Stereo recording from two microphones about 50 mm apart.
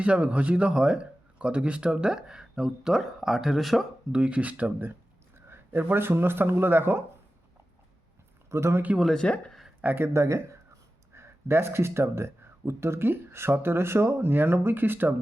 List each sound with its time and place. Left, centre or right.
0.0 s a man's voice: right; by 3.8 s centre
4.1 s a man's voice: right
4.9 s speech: right
8.4 s speech: right
9.1 s speech: left
10.0 s speech: right
11.1 s speech: right